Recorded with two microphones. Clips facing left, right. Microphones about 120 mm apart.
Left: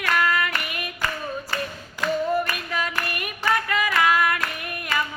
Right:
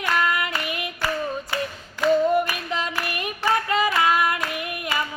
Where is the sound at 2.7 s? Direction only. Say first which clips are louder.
Even; 25° right (ahead or behind).